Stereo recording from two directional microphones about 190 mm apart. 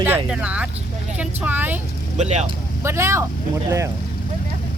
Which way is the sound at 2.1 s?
35° right (ahead or behind).